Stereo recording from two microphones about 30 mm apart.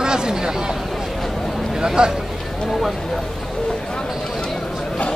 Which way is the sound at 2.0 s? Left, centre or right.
Right.